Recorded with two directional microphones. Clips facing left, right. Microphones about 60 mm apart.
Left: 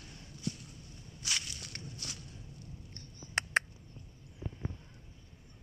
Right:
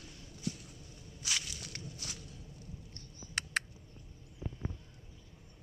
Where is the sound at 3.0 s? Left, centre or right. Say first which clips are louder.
Left 5 dB; left.